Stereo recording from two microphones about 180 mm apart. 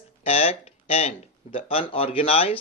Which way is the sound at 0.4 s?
35° left (ahead or behind).